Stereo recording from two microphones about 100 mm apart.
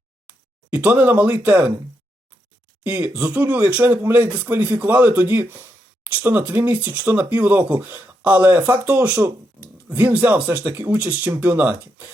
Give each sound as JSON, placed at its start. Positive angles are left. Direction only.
{"t": 0.7, "sound": "speech", "side_deg": -15}
{"t": 2.9, "sound": "speech", "side_deg": -15}